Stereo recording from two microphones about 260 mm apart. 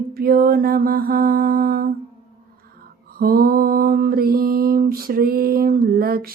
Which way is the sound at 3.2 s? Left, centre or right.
Right.